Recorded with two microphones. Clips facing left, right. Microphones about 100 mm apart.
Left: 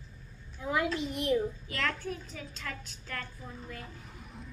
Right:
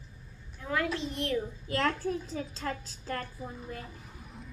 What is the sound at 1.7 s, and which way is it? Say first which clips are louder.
A child's voice: right 5 dB; 35° right (ahead or behind).